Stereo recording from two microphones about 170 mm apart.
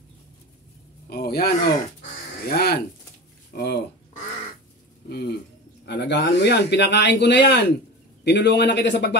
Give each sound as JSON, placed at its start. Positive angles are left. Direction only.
{"t": 1.0, "sound": "speech", "side_deg": 65}
{"t": 5.1, "sound": "bird", "side_deg": 75}
{"t": 5.9, "sound": "speech", "side_deg": 90}